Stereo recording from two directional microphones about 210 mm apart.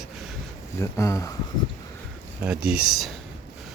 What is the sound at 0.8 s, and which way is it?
Speech, 15° left (ahead or behind).